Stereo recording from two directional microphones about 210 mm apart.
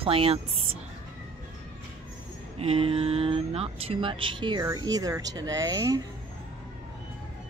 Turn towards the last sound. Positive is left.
turn(degrees=-15)  # may be behind; listen again after turning